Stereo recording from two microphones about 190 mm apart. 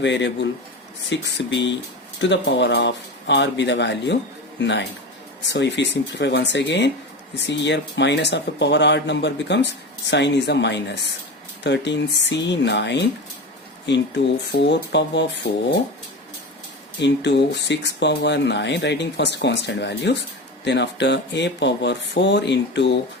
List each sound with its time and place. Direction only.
0.0 s speech: 70° left (ahead or behind)
17.0 s speech: 65° left (ahead or behind)